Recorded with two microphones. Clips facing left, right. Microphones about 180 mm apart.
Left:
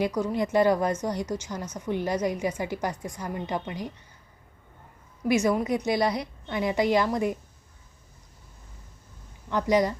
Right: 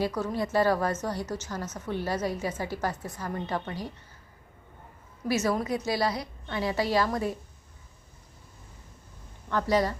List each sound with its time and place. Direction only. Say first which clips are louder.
0.0 s a woman's voice: left 3 dB; 15° left (ahead or behind)
5.3 s a woman's voice: left 3 dB; 15° left (ahead or behind)
9.5 s a woman's voice: left 2 dB; 15° left (ahead or behind)